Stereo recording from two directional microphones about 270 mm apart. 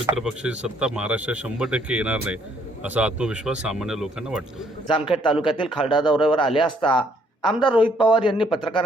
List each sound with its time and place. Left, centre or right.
0.0 s speech: centre
4.9 s a man's voice: centre